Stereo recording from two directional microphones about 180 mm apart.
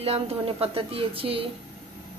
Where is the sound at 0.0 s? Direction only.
35° right (ahead or behind).